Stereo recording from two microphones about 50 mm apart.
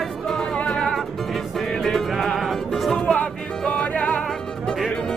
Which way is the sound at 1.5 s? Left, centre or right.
Centre.